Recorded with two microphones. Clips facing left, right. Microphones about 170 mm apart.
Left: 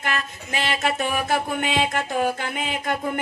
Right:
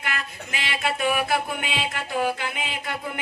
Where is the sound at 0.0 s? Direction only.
40° left (ahead or behind).